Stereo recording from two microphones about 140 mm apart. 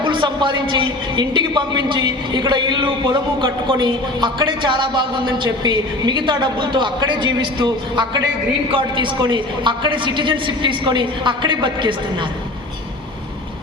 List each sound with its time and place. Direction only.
0.0 s a man's voice: 35° right (ahead or behind)